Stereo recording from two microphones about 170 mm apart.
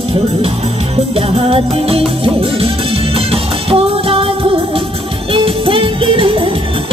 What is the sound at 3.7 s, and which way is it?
Music, 35° right (ahead or behind).